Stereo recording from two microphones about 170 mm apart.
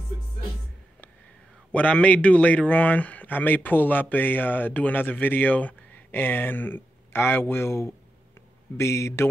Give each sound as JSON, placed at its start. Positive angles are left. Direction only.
{"t": 1.7, "sound": "a man's voice", "side_deg": 5}